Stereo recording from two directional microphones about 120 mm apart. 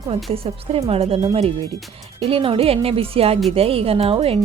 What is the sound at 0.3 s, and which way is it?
Speech, 55° right (ahead or behind).